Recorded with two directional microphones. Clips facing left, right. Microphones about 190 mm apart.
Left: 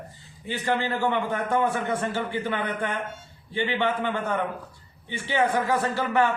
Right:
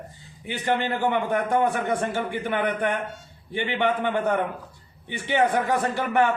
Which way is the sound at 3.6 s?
15° right (ahead or behind).